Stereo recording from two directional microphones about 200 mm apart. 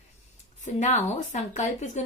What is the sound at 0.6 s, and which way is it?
A woman's voice, 35° left (ahead or behind).